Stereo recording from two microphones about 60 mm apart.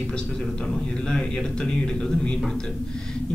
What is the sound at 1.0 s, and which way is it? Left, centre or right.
Speech, centre.